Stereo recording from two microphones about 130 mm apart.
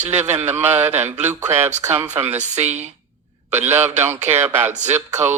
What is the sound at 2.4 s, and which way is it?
Speech, 60° right (ahead or behind).